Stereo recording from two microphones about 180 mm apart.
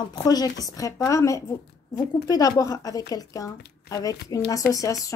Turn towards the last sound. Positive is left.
turn(degrees=20)  # may be behind; listen again after turning